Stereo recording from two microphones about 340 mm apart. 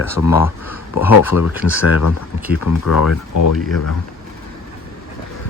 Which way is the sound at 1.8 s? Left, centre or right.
Left.